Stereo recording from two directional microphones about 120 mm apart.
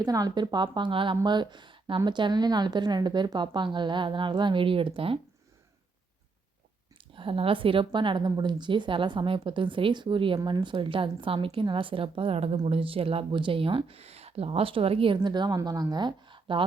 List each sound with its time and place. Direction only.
0.0 s speech: 30° right (ahead or behind); by 5.2 s 50° right (ahead or behind)
7.0 s a woman's voice: 45° right (ahead or behind)